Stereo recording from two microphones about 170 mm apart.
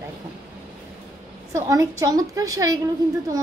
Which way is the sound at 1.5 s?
20° right (ahead or behind).